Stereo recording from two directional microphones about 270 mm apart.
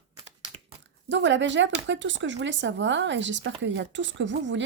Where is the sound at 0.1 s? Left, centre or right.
Right.